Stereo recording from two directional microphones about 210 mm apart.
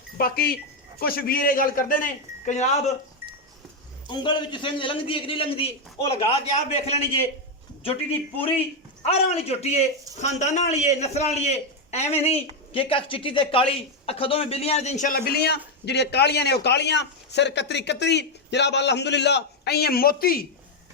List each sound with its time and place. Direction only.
0.2 s a man's voice: 45° left (ahead or behind)
4.1 s a man's voice: 20° left (ahead or behind)
8.4 s a man's voice: 25° left (ahead or behind); by 20.4 s 45° left (ahead or behind)